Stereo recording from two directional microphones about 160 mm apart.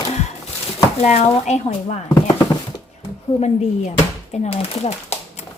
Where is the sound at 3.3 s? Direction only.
40° left (ahead or behind).